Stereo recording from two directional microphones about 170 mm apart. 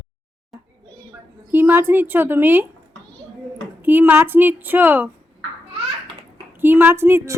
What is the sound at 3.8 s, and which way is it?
A woman's voice, 10° right (ahead or behind).